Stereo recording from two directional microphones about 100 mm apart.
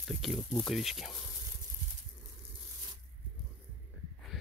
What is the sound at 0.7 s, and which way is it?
Speech, centre (ahead or behind).